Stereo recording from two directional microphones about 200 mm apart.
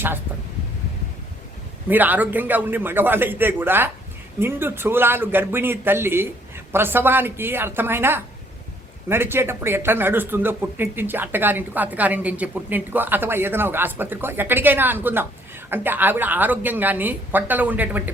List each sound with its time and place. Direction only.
1.9 s speech: 10° right (ahead or behind)